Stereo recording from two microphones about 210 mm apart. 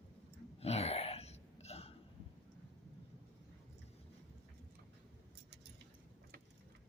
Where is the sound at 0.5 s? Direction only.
30° left (ahead or behind).